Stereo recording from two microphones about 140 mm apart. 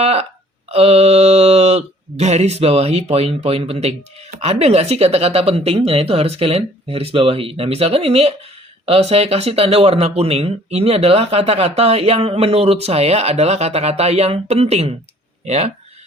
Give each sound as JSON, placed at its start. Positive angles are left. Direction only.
{"t": 0.0, "sound": "speech", "side_deg": -50}